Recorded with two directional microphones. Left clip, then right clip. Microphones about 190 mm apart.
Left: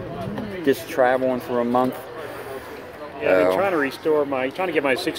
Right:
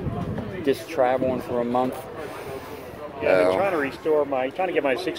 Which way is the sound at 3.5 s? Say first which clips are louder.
Left 2 dB; 55° left (ahead or behind).